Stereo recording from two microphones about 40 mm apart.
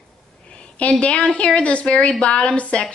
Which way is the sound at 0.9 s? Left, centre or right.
Left.